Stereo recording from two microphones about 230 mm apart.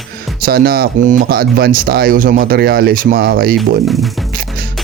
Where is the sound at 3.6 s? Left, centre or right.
Centre.